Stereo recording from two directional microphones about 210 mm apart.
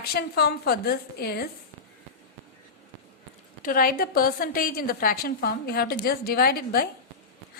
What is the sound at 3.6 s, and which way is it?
A woman's voice, 40° left (ahead or behind).